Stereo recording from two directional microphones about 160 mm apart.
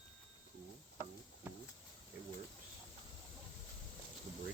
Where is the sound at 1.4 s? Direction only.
10° right (ahead or behind).